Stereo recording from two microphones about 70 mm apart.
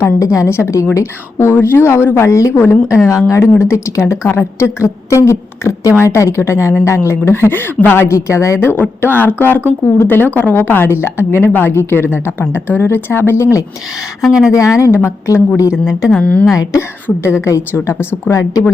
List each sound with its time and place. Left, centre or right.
0.0 s a woman's voice: left
8.0 s a woman's voice: left
8.6 s speech: left
14.2 s a woman's voice: centre
14.8 s a woman's voice: left
15.7 s a woman's voice: centre
16.2 s speech: centre
16.5 s a woman's voice: left